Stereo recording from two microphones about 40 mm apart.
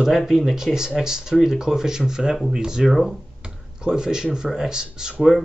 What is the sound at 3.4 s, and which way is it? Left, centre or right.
Speech, centre.